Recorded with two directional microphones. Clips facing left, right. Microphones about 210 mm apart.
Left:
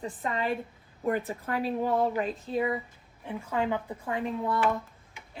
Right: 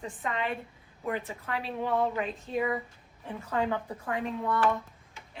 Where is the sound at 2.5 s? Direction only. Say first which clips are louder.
Left 1 dB; 25° left (ahead or behind).